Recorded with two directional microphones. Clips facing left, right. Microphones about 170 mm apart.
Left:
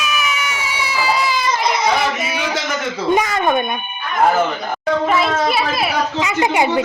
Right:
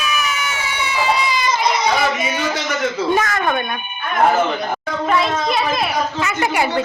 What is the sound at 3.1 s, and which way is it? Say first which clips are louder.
Speech: left 5 dB; 15° left (ahead or behind).